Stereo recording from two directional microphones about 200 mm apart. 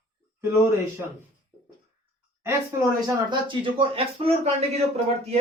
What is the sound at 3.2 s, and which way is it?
Speech, 25° right (ahead or behind).